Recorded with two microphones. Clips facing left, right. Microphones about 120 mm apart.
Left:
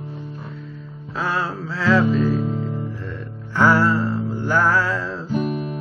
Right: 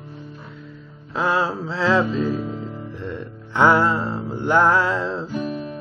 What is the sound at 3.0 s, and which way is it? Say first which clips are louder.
Music: right 2 dB; 20° right (ahead or behind).